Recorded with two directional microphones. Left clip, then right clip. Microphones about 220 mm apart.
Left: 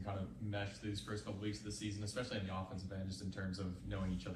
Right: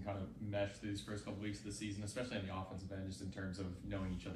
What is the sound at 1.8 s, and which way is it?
Speech, 25° right (ahead or behind).